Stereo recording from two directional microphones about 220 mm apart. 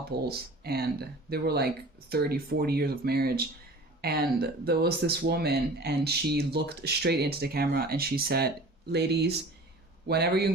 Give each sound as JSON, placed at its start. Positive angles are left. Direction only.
{"t": 0.1, "sound": "speech", "side_deg": -45}